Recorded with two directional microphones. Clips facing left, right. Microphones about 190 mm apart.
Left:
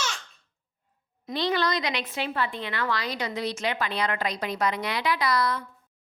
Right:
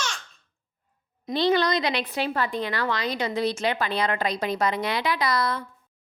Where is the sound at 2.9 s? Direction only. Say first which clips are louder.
Right 3 dB; 20° right (ahead or behind).